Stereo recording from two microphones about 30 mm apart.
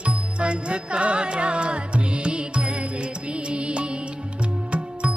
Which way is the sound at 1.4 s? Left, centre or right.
Right.